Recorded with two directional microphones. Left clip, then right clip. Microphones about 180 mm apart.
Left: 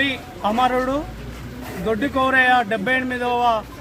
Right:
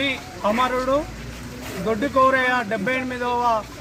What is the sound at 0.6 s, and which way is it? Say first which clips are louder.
Speech: left 3 dB; 15° left (ahead or behind).